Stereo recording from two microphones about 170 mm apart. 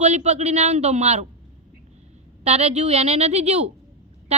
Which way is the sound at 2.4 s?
40° right (ahead or behind).